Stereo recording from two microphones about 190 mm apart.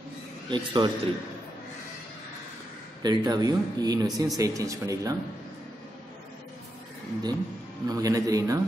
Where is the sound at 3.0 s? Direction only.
20° right (ahead or behind).